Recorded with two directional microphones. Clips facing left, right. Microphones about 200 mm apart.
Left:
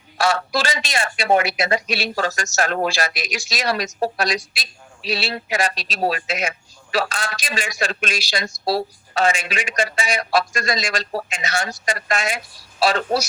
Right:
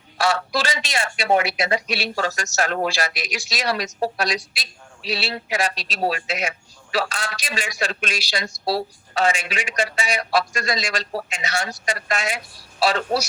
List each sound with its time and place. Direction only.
0.2 s speech: 50° left (ahead or behind)